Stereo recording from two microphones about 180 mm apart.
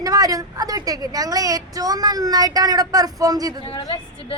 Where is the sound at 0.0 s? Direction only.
20° right (ahead or behind).